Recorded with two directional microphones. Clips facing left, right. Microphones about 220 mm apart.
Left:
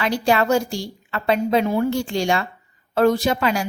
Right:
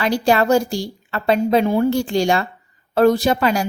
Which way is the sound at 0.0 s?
40° right (ahead or behind).